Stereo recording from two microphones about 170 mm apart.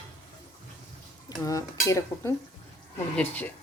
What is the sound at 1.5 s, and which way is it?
Speech, 20° left (ahead or behind).